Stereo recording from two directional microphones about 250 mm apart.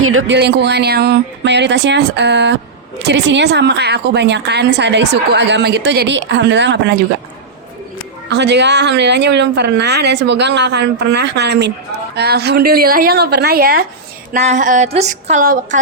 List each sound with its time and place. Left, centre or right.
0.0 s a woman's voice: right
8.3 s a woman's voice: right
14.3 s a sound: right